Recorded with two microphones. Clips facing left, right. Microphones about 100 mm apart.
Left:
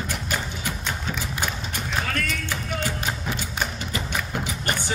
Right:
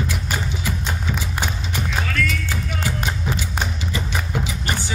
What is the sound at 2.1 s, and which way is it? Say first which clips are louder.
Music: right 4 dB; 45° left (ahead or behind).